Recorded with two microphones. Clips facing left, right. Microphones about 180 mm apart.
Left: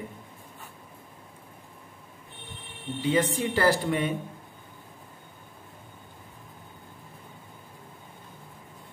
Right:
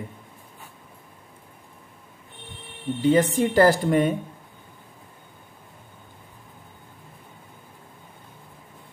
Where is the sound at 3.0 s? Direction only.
45° right (ahead or behind).